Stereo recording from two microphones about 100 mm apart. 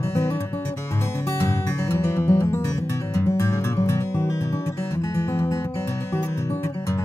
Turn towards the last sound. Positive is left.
turn(degrees=30)  # may be behind; listen again after turning